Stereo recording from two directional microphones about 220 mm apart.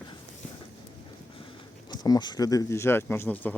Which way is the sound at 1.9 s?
20° left (ahead or behind).